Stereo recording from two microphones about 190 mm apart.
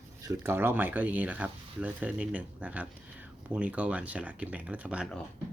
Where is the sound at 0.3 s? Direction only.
10° right (ahead or behind).